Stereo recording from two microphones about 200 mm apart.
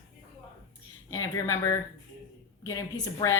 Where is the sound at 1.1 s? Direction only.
15° left (ahead or behind).